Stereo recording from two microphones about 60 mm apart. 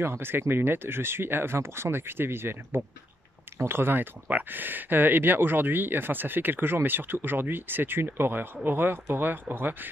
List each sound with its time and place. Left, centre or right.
0.0 s speech: right